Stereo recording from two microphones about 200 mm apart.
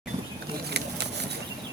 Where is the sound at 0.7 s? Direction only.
55° right (ahead or behind).